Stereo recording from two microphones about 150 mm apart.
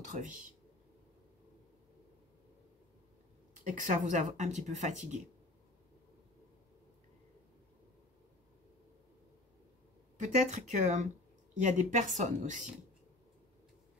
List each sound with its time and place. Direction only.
0.1 s speech: 55° right (ahead or behind)
3.6 s speech: 55° right (ahead or behind)
10.1 s speech: 55° right (ahead or behind)